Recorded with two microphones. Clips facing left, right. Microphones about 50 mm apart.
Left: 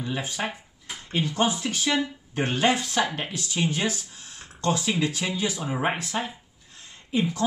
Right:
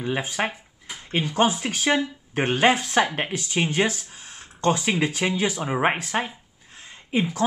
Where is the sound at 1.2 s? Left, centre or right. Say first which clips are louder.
Right 3 dB; right.